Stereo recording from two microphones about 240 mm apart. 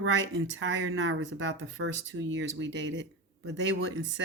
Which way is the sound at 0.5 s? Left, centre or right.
Right.